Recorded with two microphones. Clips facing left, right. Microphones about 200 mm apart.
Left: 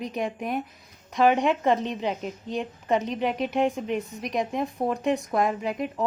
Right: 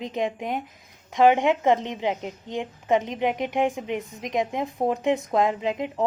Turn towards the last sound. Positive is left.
turn(degrees=-20)  # may be behind; listen again after turning